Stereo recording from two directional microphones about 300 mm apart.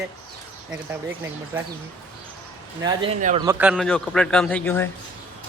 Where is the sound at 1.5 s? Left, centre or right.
Centre.